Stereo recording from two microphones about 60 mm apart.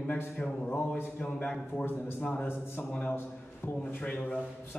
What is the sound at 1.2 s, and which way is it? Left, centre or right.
Speech, centre.